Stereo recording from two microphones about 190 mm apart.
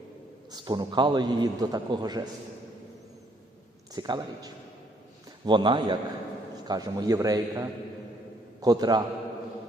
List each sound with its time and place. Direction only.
0.5 s a man's voice: 20° right (ahead or behind)
3.9 s a man's voice: 20° right (ahead or behind)